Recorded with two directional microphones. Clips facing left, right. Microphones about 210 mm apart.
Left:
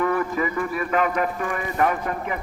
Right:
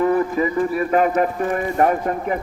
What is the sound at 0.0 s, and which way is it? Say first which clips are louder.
Speech: right 5 dB; 30° right (ahead or behind).